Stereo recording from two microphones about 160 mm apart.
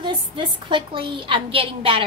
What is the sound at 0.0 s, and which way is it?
A woman's voice, 30° right (ahead or behind).